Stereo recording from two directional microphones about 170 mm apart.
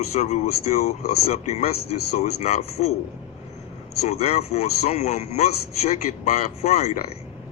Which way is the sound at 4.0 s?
40° left (ahead or behind).